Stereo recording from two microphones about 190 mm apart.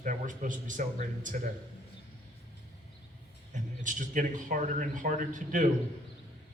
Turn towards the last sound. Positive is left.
turn(degrees=-40)  # may be behind; listen again after turning